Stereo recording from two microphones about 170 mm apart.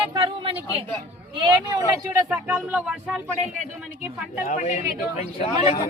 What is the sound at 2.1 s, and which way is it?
Speech, 10° right (ahead or behind).